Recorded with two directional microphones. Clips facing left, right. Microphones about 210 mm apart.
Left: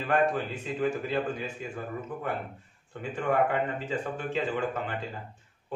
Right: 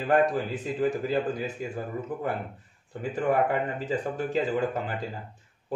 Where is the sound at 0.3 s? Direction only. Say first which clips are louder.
Right 2 dB; 35° right (ahead or behind).